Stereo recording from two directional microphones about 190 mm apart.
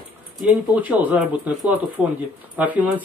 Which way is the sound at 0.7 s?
10° right (ahead or behind).